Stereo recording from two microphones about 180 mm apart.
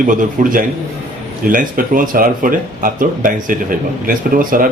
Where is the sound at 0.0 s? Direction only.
45° right (ahead or behind).